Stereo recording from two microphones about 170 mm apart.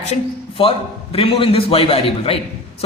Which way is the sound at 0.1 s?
35° left (ahead or behind).